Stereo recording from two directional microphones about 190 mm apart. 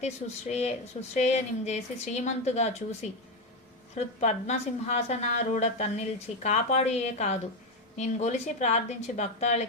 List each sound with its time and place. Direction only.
0.0 s a woman's voice: 35° left (ahead or behind)